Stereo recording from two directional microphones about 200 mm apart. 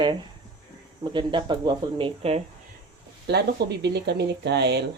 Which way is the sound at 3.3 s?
55° right (ahead or behind).